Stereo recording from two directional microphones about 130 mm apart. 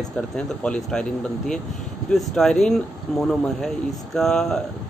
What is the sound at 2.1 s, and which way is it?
Speech, 5° left (ahead or behind).